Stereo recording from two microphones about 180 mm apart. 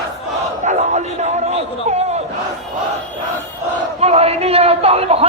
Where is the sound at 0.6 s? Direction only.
40° right (ahead or behind).